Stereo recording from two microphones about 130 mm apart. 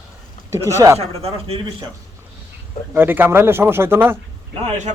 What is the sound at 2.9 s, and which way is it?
Speech, 15° right (ahead or behind).